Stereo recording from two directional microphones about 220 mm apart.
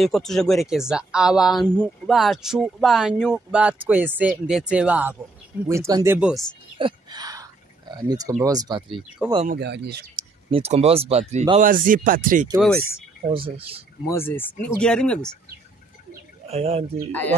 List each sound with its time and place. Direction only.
0.0 s speech: centre (ahead or behind)
6.8 s a sound: 20° right (ahead or behind)
8.4 s speech: 15° right (ahead or behind)
9.5 s speech: 50° right (ahead or behind)
10.5 s speech: 30° right (ahead or behind)
12.5 s speech: centre (ahead or behind)
13.3 s speech: 25° right (ahead or behind)
14.0 s speech: 10° left (ahead or behind)
16.1 s bird: 30° right (ahead or behind)